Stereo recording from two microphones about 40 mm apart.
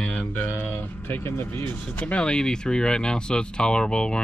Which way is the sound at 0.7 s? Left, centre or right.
Left.